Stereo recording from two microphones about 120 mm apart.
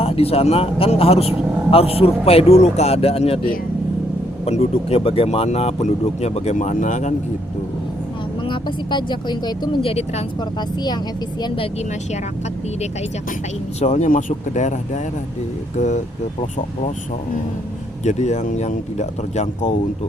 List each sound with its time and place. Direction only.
0.0 s a man's voice: 55° left (ahead or behind)
4.4 s a man's voice: 60° left (ahead or behind); by 7.1 s 90° left
8.4 s speech: 40° left (ahead or behind)
9.8 s a man's voice: 55° left (ahead or behind)
11.4 s a woman's voice: 50° left (ahead or behind)
13.7 s speech: 80° left
18.0 s speech: 75° left (ahead or behind)